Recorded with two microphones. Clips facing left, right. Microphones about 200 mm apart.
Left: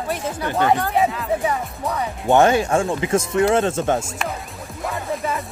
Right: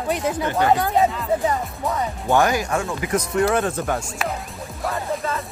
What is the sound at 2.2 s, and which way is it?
Speech, 25° left (ahead or behind).